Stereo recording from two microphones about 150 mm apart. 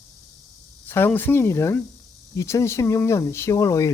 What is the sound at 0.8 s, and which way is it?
Speech, 15° left (ahead or behind).